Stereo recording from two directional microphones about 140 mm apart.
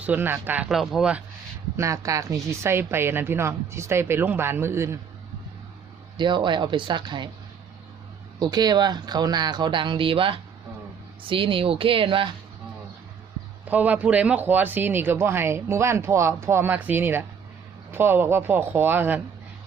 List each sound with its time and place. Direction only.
0.0 s speech: 10° right (ahead or behind)
0.7 s speech: centre (ahead or behind)
1.7 s speech: 20° right (ahead or behind)
6.1 s speech: 35° right (ahead or behind)
8.4 s speech: 30° right (ahead or behind)
13.7 s speech: 10° right (ahead or behind)